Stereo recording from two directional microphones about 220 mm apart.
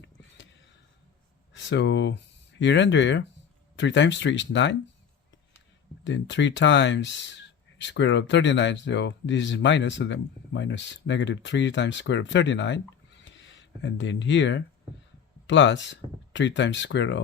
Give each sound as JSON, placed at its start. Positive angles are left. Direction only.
{"t": 1.5, "sound": "speech", "side_deg": 55}
{"t": 6.1, "sound": "speech", "side_deg": 55}
{"t": 13.1, "sound": "a sound", "side_deg": 55}
{"t": 15.4, "sound": "speech", "side_deg": 55}